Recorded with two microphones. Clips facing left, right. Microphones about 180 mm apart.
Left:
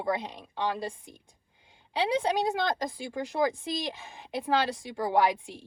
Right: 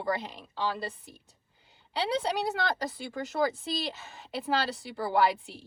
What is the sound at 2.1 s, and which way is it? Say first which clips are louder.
A woman's voice: left 3 dB; 15° left (ahead or behind).